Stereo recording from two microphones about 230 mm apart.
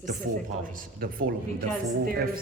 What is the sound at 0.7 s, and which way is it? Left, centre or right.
A man's voice, right.